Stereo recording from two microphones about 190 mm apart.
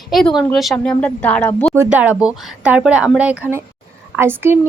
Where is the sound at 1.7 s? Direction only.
10° right (ahead or behind).